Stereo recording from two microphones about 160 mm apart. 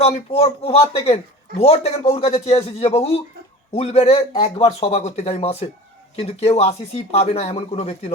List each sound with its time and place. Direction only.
0.0 s a man's voice: 40° left (ahead or behind)